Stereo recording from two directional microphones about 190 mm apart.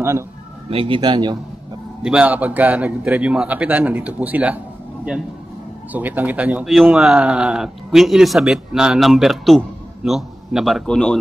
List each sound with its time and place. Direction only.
0.7 s speech: 30° right (ahead or behind)
2.0 s a man's voice: 5° right (ahead or behind)
5.9 s a man's voice: 10° right (ahead or behind)